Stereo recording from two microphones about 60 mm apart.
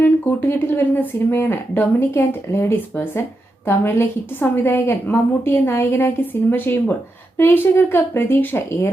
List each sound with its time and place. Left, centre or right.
0.4 s a woman's voice: left
2.9 s a woman's voice: left